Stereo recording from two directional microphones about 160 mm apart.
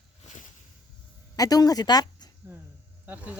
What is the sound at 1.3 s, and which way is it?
Speech, 25° left (ahead or behind).